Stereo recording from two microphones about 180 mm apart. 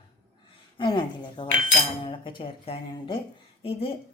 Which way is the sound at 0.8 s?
25° left (ahead or behind).